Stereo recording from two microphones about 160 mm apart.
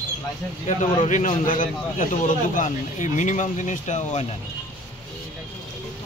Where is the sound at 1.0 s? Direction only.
50° left (ahead or behind).